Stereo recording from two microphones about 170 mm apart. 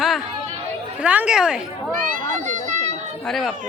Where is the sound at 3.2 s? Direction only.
Centre (ahead or behind).